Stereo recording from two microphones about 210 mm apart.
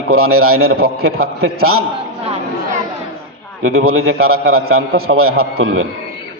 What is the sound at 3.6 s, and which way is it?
A man's voice, 80° right.